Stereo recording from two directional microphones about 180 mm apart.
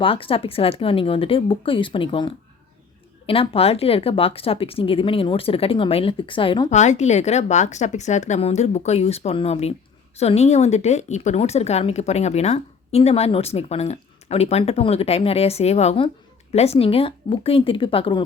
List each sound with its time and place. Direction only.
0.0 s speech: 30° left (ahead or behind)
6.7 s a woman's voice: 40° left (ahead or behind)